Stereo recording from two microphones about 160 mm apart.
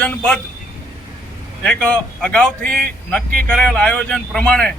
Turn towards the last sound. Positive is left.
turn(degrees=5)  # may be behind; listen again after turning